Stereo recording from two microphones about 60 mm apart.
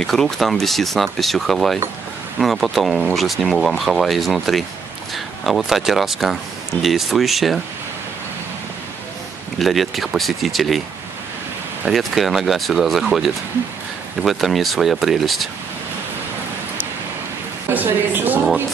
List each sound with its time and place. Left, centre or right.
0.0 s speech: centre
9.6 s speech: centre
11.9 s speech: centre
17.7 s a woman's voice: right